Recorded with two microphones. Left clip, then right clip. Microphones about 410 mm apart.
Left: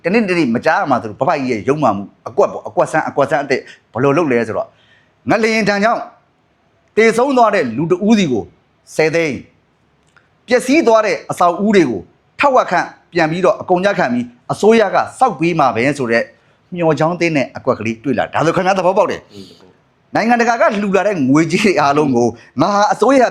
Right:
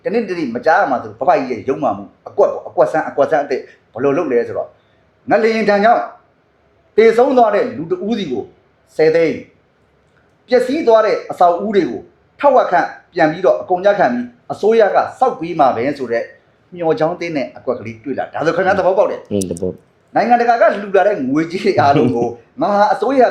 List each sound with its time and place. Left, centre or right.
0.0 s a man's voice: left
10.4 s a man's voice: left